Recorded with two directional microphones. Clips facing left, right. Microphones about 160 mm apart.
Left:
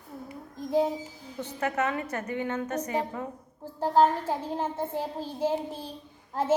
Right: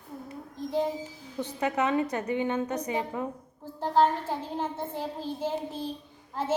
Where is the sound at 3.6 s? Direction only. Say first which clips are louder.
Left 2 dB; 10° left (ahead or behind).